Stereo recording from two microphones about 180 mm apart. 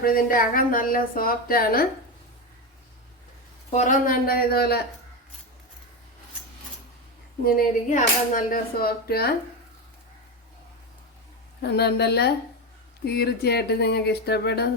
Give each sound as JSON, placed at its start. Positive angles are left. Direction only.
{"t": 0.0, "sound": "speech", "side_deg": 50}
{"t": 3.7, "sound": "speech", "side_deg": 45}
{"t": 7.4, "sound": "speech", "side_deg": 45}
{"t": 11.6, "sound": "speech", "side_deg": 65}